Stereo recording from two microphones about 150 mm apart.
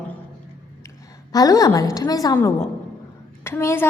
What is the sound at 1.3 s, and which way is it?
A woman's voice, 25° left (ahead or behind).